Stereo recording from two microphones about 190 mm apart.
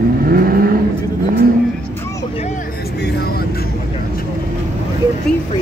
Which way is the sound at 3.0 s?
60° left (ahead or behind).